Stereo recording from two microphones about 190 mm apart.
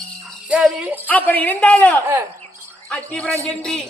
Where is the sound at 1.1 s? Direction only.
10° left (ahead or behind).